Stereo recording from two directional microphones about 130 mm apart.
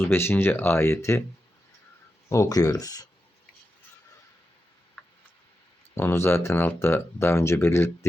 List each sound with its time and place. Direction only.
0.0 s speech: 20° left (ahead or behind)
2.3 s speech: 25° left (ahead or behind)
5.0 s a sound: 5° left (ahead or behind)
5.9 s speech: 20° left (ahead or behind)